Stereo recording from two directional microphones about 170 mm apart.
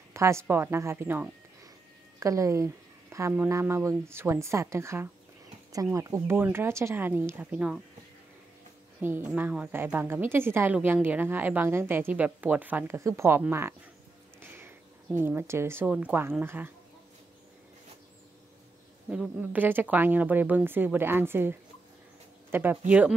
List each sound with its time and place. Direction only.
0.1 s a woman's voice: 15° right (ahead or behind)
9.0 s a woman's voice: 10° right (ahead or behind)
19.0 s a woman's voice: 10° right (ahead or behind)